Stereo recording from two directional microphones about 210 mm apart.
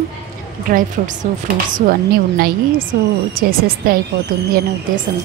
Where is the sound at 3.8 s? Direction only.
45° right (ahead or behind).